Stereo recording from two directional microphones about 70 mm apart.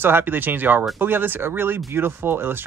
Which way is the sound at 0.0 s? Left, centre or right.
Right.